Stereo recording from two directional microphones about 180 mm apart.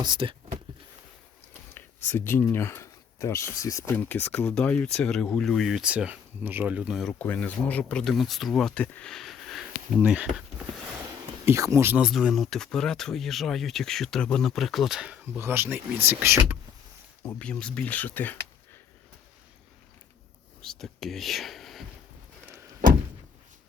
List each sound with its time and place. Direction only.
0.0 s speech: 25° right (ahead or behind)
1.7 s speech: 10° left (ahead or behind); by 10.4 s 5° right (ahead or behind)
11.4 s speech: 15° right (ahead or behind)
17.2 s speech: 5° left (ahead or behind)
20.6 s speech: 5° left (ahead or behind)